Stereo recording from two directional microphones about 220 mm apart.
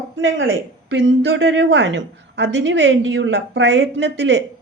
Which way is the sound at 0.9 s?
55° right (ahead or behind).